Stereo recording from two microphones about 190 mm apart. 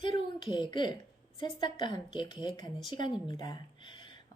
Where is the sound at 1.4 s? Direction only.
25° left (ahead or behind).